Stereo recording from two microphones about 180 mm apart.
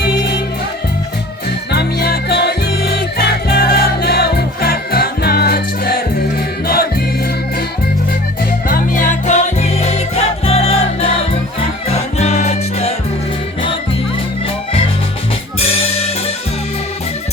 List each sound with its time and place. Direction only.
0.0 s music: 60° left (ahead or behind)
1.7 s music: 60° left (ahead or behind)
8.6 s music: 50° left (ahead or behind)